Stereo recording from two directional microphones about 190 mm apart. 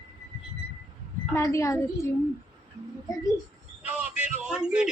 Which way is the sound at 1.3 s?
15° left (ahead or behind).